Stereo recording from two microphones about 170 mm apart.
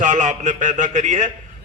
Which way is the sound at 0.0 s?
45° right (ahead or behind).